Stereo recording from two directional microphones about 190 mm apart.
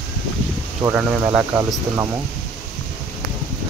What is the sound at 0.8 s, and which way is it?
Speech, 10° right (ahead or behind).